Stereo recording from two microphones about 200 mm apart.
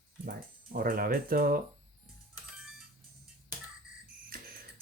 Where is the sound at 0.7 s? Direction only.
45° right (ahead or behind).